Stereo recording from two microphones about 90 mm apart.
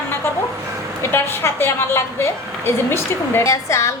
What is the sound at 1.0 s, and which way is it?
A woman's voice, 25° left (ahead or behind).